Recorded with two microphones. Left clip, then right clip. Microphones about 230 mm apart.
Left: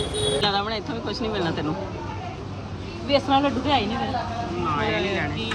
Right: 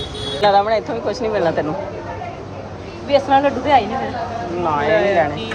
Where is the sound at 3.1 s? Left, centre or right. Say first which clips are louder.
Right 6 dB; left.